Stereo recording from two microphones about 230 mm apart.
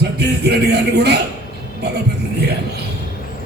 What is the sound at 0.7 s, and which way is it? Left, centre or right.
Speech, right.